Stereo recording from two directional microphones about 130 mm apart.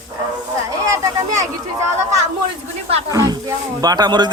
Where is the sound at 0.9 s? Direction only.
25° right (ahead or behind).